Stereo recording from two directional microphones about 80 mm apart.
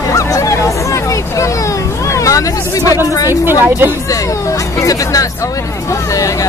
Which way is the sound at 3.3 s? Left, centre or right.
Right.